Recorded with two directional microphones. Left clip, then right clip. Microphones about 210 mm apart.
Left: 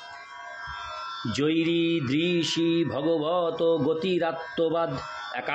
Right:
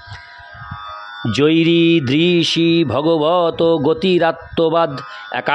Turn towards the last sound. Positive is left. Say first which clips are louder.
# right 11 dB
turn(degrees=-55)  # may be behind; listen again after turning